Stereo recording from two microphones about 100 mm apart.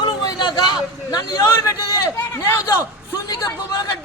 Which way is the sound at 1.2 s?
35° left (ahead or behind).